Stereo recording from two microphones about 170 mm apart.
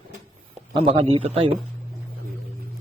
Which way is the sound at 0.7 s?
35° right (ahead or behind).